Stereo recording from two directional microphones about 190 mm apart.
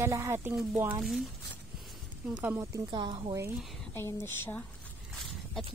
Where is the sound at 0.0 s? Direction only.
15° right (ahead or behind).